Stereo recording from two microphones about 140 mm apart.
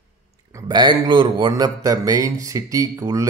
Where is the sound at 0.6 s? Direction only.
35° right (ahead or behind).